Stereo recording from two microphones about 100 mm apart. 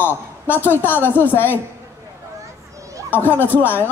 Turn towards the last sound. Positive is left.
turn(degrees=20)  # may be behind; listen again after turning